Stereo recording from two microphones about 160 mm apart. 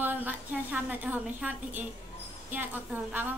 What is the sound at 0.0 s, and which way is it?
A man's voice, 10° right (ahead or behind).